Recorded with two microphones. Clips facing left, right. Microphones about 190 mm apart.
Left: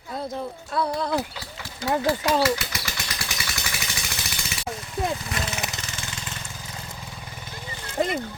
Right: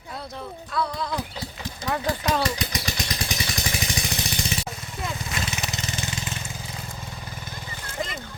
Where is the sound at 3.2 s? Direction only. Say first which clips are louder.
Right 4 dB; 35° right (ahead or behind).